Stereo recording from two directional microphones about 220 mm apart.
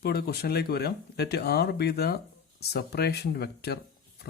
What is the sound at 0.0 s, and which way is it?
Speech, 45° left (ahead or behind).